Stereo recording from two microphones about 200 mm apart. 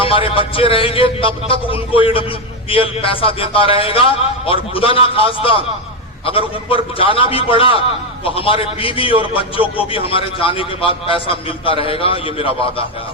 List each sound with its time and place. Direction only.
0.0 s a man's voice: 25° left (ahead or behind)